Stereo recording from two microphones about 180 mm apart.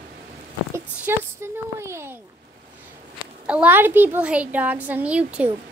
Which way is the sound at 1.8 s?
15° right (ahead or behind).